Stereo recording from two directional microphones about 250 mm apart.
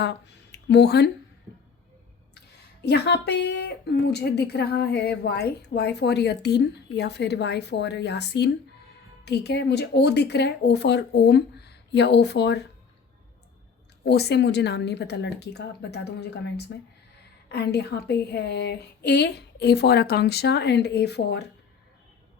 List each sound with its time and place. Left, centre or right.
0.0 s speech: left
2.8 s a woman's voice: left
14.0 s a woman's voice: left